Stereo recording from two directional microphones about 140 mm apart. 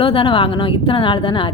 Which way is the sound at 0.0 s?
40° left (ahead or behind).